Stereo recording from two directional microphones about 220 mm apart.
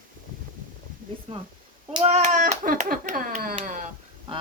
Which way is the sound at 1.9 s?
30° right (ahead or behind).